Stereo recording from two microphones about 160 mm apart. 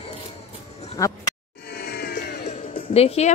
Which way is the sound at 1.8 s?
75° left (ahead or behind).